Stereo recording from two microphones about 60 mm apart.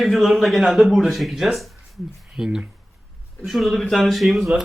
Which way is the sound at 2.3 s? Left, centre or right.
Centre.